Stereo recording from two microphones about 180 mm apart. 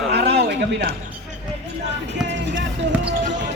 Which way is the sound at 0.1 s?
65° right (ahead or behind).